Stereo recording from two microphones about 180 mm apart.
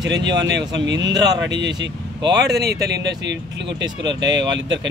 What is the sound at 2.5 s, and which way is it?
Speech, 65° right (ahead or behind).